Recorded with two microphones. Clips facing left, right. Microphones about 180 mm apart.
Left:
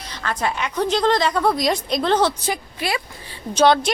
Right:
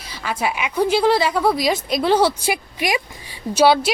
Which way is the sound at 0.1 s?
10° right (ahead or behind).